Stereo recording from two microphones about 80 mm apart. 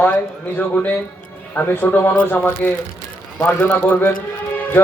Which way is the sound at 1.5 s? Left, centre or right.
Left.